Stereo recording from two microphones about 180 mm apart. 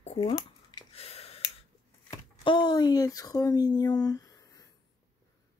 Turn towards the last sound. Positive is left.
turn(degrees=20)  # may be behind; listen again after turning